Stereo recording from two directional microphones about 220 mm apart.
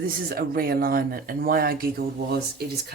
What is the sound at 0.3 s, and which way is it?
Speech, 45° right (ahead or behind).